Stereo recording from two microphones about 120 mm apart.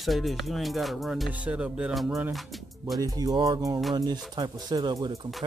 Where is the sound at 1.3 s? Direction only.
10° right (ahead or behind).